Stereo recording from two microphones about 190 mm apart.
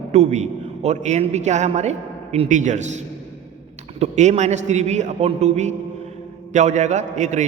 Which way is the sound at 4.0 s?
35° right (ahead or behind).